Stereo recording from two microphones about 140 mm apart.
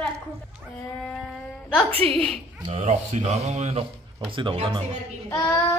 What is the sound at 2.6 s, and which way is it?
Speech, 40° right (ahead or behind).